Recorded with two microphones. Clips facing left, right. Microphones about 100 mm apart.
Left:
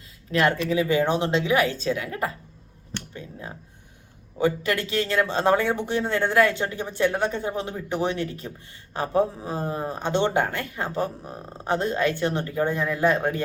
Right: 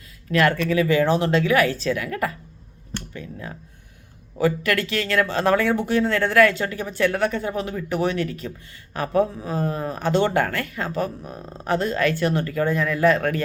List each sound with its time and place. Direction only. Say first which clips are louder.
0.3 s speech: right 2 dB; 25° left (ahead or behind)
3.1 s a sound: right 3 dB; 25° left (ahead or behind)
4.4 s speech: right 2 dB; 25° left (ahead or behind)